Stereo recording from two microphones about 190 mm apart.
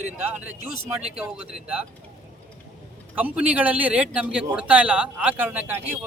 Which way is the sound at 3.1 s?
10° right (ahead or behind).